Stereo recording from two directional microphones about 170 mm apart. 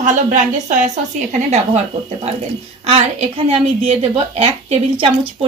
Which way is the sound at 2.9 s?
35° right (ahead or behind).